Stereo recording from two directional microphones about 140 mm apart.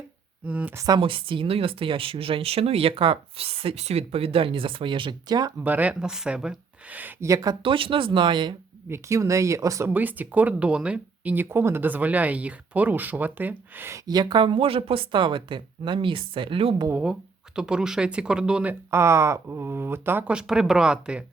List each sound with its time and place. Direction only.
0.4 s speech: 10° right (ahead or behind)
0.8 s a woman's voice: 25° right (ahead or behind)
1.0 s speech: 40° right (ahead or behind)
5.6 s speech: 10° right (ahead or behind)
7.6 s speech: 40° right (ahead or behind)
8.9 s speech: 20° right (ahead or behind)
14.1 s speech: 30° right (ahead or behind)
16.9 s speech: 5° right (ahead or behind)